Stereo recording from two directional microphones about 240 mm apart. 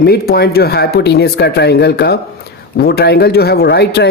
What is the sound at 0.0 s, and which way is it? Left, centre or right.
Speech, left.